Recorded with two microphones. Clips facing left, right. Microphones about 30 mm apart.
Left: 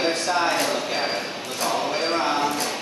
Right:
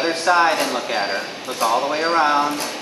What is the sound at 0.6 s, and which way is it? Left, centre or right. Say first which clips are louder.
Speech: right 2 dB; centre.